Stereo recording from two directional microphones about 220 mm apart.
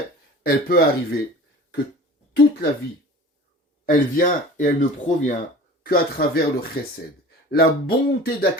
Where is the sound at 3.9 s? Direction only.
40° left (ahead or behind).